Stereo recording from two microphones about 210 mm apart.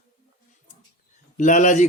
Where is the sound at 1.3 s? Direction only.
35° left (ahead or behind).